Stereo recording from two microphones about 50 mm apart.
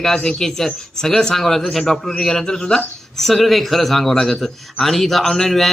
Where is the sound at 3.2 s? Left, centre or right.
Centre.